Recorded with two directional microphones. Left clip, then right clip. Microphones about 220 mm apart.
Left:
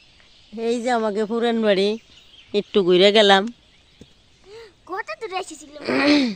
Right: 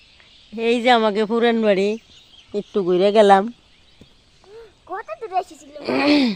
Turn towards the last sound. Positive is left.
turn(degrees=0)  # may be behind; listen again after turning